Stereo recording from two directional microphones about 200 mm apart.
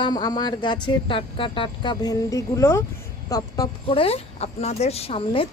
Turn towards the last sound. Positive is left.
turn(degrees=25)  # may be behind; listen again after turning